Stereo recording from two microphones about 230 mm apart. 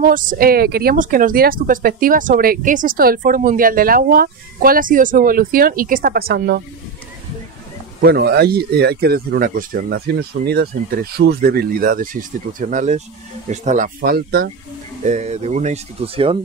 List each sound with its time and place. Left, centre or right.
0.0 s speech: right
8.0 s speech: right
15.0 s speech: right